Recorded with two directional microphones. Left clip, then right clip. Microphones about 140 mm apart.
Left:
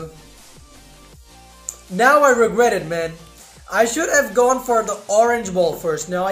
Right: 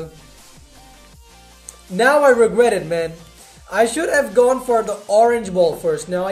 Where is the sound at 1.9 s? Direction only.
20° right (ahead or behind).